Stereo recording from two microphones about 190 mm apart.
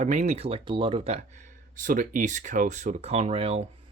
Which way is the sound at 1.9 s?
45° right (ahead or behind).